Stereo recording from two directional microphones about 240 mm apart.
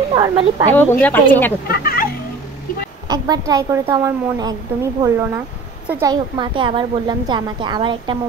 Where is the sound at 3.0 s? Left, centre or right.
Centre.